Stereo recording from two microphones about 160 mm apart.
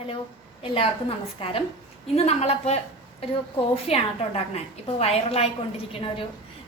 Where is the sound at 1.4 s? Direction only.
35° left (ahead or behind).